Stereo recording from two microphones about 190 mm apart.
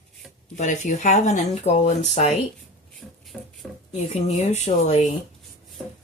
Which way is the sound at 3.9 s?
35° left (ahead or behind).